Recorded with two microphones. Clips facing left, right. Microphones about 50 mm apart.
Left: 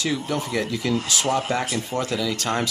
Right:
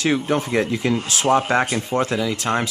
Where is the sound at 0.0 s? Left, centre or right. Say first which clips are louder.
Right 5 dB; right.